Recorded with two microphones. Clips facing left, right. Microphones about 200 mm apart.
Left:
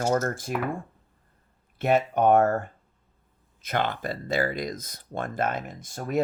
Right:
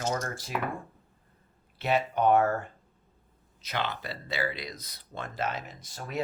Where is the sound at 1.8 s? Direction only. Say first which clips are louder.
Left 4 dB; 50° left (ahead or behind).